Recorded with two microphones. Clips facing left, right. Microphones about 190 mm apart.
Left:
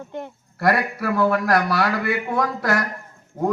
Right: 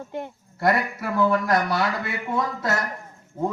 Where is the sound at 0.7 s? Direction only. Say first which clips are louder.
Left 3 dB; 65° left (ahead or behind).